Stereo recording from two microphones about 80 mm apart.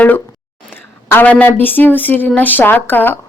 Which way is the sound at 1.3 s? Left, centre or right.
Left.